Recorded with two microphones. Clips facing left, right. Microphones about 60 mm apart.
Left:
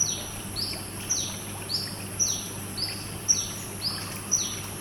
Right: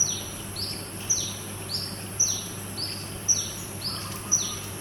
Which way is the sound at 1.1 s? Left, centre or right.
Left.